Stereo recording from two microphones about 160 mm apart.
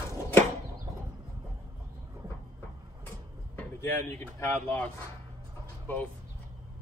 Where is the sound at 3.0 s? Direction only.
15° left (ahead or behind).